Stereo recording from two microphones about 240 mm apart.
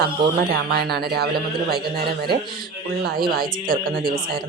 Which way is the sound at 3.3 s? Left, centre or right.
Right.